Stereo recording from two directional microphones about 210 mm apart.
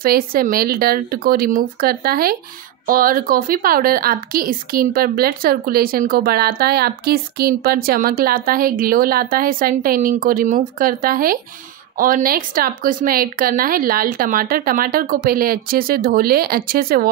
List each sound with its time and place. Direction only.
0.0 s a woman's voice: 45° right (ahead or behind)